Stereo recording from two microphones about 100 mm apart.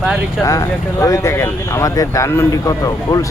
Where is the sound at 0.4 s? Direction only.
35° left (ahead or behind).